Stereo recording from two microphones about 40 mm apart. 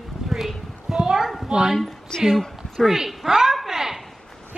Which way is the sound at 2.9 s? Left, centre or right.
Centre.